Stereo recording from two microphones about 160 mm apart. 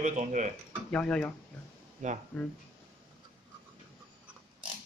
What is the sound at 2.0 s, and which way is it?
Speech, 50° right (ahead or behind).